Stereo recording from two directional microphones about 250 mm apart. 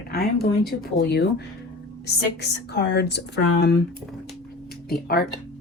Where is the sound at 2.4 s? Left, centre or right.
Left.